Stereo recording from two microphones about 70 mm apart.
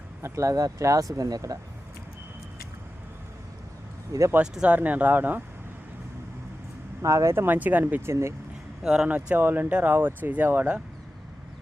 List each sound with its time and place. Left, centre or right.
0.2 s speech: right
4.1 s speech: right
4.6 s speech: right
7.0 s speech: right
7.4 s speech: right
8.8 s speech: centre
9.0 s speech: right